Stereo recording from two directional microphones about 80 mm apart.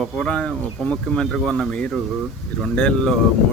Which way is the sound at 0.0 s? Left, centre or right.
Centre.